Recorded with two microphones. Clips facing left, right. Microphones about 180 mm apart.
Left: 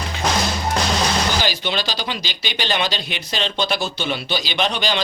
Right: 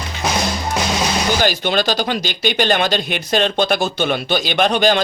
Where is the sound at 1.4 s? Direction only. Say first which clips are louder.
Right 6 dB; 50° right (ahead or behind).